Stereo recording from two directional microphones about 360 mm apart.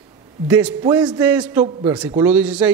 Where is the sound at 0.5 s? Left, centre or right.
Centre.